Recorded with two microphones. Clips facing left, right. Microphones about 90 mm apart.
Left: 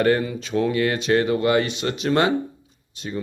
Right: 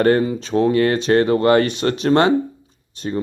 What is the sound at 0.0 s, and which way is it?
Speech, 35° right (ahead or behind).